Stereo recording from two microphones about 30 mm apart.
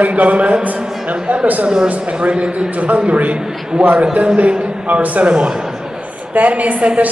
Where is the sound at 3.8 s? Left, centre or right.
Right.